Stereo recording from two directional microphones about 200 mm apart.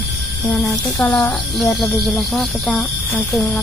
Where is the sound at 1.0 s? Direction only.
10° left (ahead or behind).